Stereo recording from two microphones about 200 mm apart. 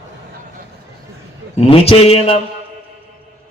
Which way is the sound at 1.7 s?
30° left (ahead or behind).